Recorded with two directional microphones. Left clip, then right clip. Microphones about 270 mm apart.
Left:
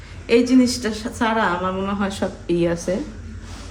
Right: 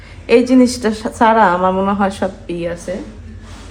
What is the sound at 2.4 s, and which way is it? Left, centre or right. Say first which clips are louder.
Speech: left 2 dB; centre.